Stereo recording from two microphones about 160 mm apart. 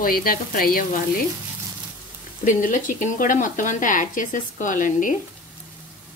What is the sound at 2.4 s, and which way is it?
A woman's voice, 55° left (ahead or behind).